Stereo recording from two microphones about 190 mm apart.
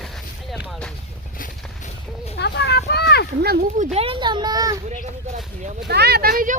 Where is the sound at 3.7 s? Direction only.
35° right (ahead or behind); by 4.8 s 20° right (ahead or behind).